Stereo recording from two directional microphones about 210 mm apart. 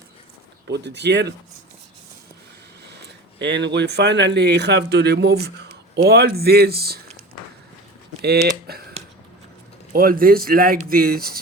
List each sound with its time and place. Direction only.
0.7 s speech: 55° right (ahead or behind)
3.3 s speech: 55° right (ahead or behind)
8.7 s a sound: 50° right (ahead or behind)
9.9 s speech: 45° right (ahead or behind)